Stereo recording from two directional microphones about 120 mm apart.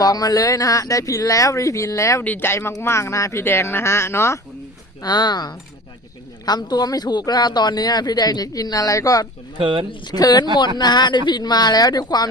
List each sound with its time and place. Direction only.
0.0 s speech: 30° left (ahead or behind)
5.0 s a man's voice: 35° left (ahead or behind)
9.6 s speech: 45° right (ahead or behind)
10.1 s a man's voice: 35° left (ahead or behind)